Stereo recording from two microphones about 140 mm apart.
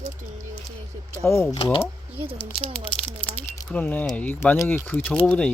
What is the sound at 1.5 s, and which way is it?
Speech, 40° left (ahead or behind).